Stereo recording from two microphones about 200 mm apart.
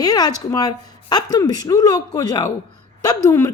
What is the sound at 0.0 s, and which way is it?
A woman's voice, 20° left (ahead or behind).